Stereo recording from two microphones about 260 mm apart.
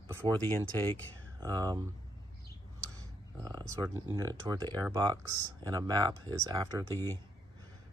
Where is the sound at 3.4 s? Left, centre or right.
Centre.